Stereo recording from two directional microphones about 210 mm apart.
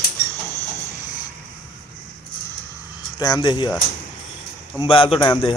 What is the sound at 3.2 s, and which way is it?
Speech, 20° left (ahead or behind).